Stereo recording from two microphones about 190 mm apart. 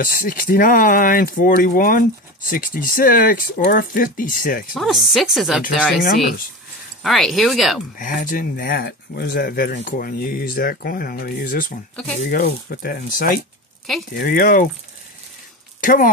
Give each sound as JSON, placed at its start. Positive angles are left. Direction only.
{"t": 0.0, "sound": "speech", "side_deg": 45}
{"t": 4.7, "sound": "speech", "side_deg": 0}
{"t": 8.0, "sound": "speech", "side_deg": 45}
{"t": 15.8, "sound": "speech", "side_deg": 45}